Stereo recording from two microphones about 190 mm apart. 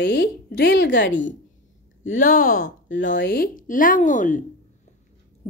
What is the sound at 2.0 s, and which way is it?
A woman's voice, 45° left (ahead or behind).